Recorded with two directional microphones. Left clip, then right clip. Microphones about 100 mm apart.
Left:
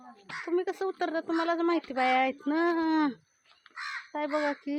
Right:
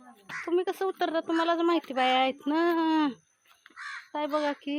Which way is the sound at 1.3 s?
35° right (ahead or behind).